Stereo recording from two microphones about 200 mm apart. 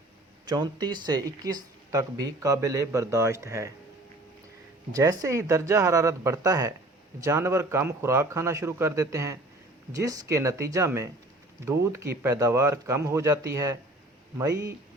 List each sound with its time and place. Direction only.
0.4 s speech: 20° right (ahead or behind)
4.9 s speech: 15° right (ahead or behind)